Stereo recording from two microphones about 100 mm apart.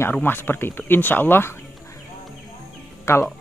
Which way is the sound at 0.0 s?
20° left (ahead or behind).